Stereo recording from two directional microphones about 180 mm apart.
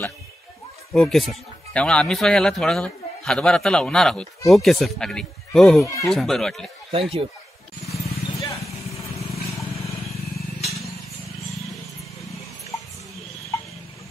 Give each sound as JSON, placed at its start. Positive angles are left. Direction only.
{"t": 0.9, "sound": "a man's voice", "side_deg": 0}
{"t": 6.9, "sound": "speech", "side_deg": -30}
{"t": 7.8, "sound": "vehicle", "side_deg": 15}
{"t": 8.6, "sound": "vehicle", "side_deg": 0}